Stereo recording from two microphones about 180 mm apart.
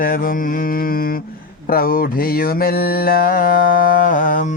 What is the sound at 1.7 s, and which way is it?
Mantra, 55° left (ahead or behind).